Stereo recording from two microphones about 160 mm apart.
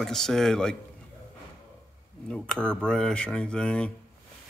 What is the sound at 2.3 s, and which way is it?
Speech, 5° left (ahead or behind).